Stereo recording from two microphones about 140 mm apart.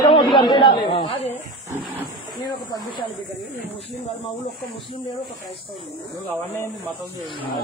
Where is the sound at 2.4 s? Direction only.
30° left (ahead or behind).